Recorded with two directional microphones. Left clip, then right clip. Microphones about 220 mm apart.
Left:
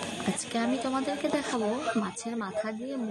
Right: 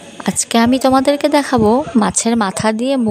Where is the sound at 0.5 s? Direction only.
50° right (ahead or behind).